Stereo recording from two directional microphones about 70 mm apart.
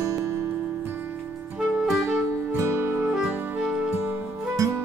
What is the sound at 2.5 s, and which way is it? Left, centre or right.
Music, right.